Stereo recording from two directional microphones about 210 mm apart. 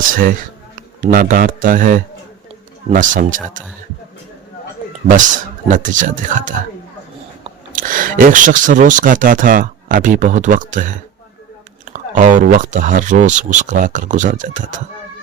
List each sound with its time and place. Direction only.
0.8 s speech: 40° right (ahead or behind)
5.0 s speech: 35° right (ahead or behind)
7.7 s speech: 40° right (ahead or behind)
11.9 s speech: 35° right (ahead or behind)